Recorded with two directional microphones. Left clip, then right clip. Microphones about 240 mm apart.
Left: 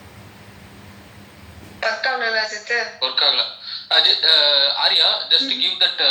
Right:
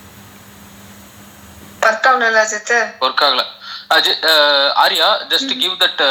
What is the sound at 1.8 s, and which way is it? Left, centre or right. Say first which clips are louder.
Speech: right 9 dB; right.